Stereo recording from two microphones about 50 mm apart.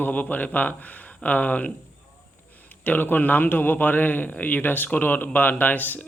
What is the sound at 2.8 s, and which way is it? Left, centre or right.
Speech, left.